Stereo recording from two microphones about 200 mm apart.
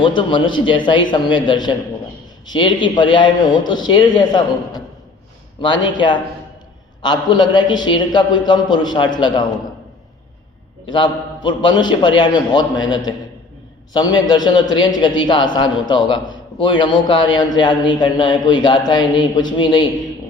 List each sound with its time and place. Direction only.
0.0 s a man's voice: 25° left (ahead or behind)
10.8 s a man's voice: 25° left (ahead or behind)